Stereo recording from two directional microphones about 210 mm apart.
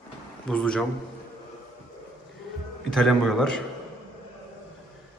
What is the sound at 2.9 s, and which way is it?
Speech, centre (ahead or behind).